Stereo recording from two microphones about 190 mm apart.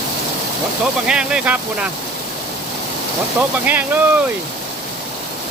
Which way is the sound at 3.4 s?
10° right (ahead or behind).